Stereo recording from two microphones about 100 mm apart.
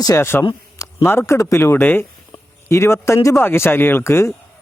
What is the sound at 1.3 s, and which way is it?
Speech, 30° left (ahead or behind).